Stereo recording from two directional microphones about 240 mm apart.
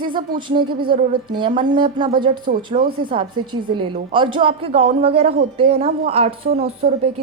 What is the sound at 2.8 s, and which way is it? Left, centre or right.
Speech, right.